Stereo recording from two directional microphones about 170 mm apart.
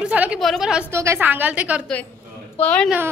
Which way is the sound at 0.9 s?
15° right (ahead or behind).